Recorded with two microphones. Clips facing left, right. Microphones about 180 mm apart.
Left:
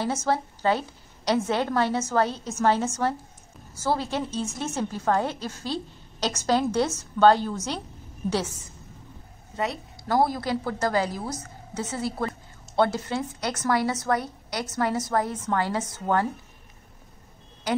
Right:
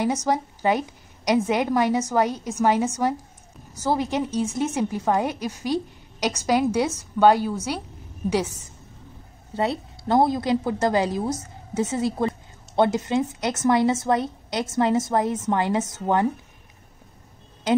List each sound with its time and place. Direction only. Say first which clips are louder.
0.0 s a woman's voice: right 3 dB; 15° right (ahead or behind)
9.5 s a woman's voice: right 5 dB; 30° right (ahead or behind)